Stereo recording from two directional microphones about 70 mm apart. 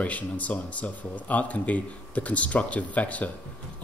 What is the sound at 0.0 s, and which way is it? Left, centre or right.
Speech, left.